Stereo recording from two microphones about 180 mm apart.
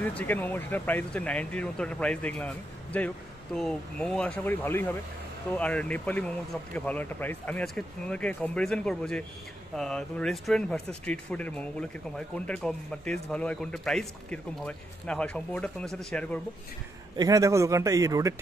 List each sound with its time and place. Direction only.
0.0 s a man's voice: 10° left (ahead or behind)
17.2 s speech: 20° right (ahead or behind)